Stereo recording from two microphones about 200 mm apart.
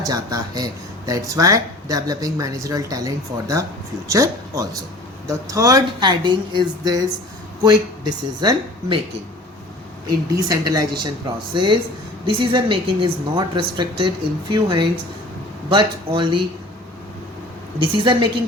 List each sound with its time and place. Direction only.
0.0 s a woman's voice: 20° right (ahead or behind)
10.5 s a woman's voice: 20° right (ahead or behind)
17.7 s a woman's voice: 25° right (ahead or behind)